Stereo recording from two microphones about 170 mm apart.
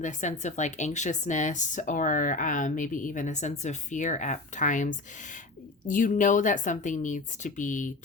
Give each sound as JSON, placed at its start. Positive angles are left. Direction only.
{"t": 0.0, "sound": "speech", "side_deg": 45}